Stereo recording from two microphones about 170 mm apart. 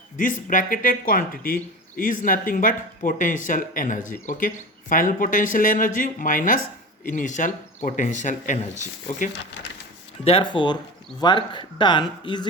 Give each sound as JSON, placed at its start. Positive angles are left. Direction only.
{"t": 0.2, "sound": "speech", "side_deg": 50}
{"t": 10.2, "sound": "speech", "side_deg": 30}